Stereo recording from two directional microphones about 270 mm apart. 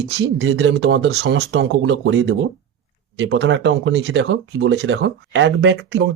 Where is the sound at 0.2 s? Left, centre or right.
Right.